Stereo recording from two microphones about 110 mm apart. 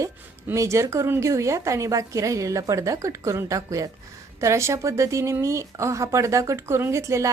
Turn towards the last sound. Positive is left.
turn(degrees=-30)  # may be behind; listen again after turning